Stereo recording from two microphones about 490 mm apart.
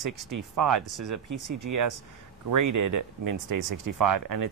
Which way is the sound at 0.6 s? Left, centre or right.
Right.